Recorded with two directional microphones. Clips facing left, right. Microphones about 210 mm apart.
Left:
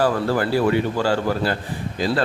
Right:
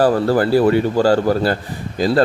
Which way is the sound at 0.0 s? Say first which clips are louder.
Right 5 dB; 40° right (ahead or behind).